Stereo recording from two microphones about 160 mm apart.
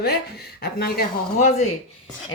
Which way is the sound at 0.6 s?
75° left (ahead or behind).